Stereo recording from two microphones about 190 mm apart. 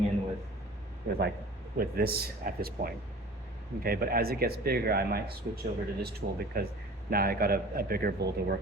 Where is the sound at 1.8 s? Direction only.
55° right (ahead or behind).